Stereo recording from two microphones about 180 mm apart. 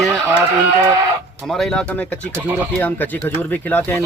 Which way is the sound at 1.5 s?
5° left (ahead or behind).